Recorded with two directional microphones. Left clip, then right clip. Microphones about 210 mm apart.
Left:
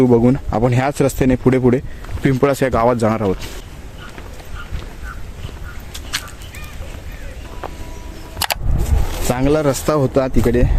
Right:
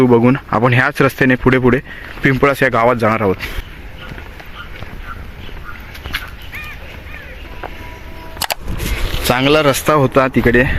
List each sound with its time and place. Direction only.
0.0 s speech: 5° left (ahead or behind)
8.4 s vehicle: centre (ahead or behind)
9.3 s speech: 5° left (ahead or behind)